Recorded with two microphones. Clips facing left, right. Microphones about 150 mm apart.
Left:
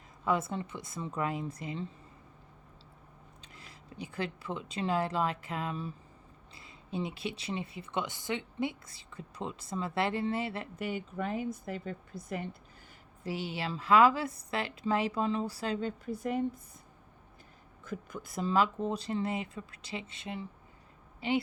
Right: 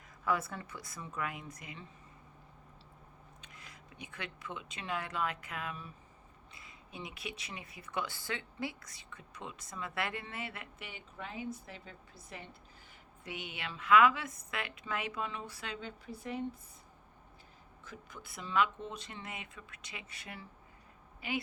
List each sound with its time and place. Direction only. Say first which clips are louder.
0.3 s speech: left 4 dB; 25° left (ahead or behind)
3.4 s speech: left 3 dB; 30° left (ahead or behind); by 12.5 s 45° left (ahead or behind)
13.2 s a woman's voice: left 8 dB; 35° left (ahead or behind)
17.8 s a woman's voice: left 10 dB; 45° left (ahead or behind); by 21.4 s 30° left (ahead or behind)